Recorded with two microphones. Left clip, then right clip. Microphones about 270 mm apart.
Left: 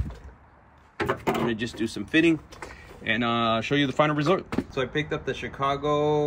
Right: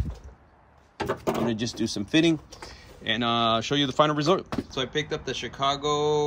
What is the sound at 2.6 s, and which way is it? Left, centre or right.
Speech, centre.